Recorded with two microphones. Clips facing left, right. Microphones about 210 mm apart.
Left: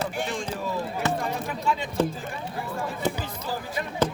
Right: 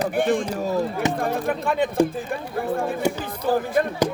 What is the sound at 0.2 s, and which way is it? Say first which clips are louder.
Speech: right 8 dB; 55° right (ahead or behind).